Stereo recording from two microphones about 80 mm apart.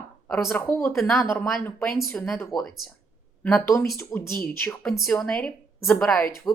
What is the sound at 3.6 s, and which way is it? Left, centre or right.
Speech, left.